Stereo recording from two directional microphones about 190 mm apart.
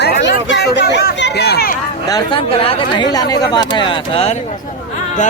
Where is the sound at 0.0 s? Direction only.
65° left (ahead or behind).